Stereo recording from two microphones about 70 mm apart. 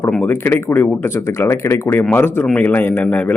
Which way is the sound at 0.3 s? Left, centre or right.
Left.